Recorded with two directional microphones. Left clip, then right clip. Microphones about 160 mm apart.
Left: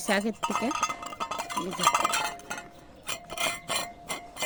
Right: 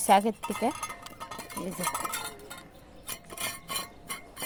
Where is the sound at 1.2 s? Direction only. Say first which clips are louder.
Left 7 dB; 20° left (ahead or behind).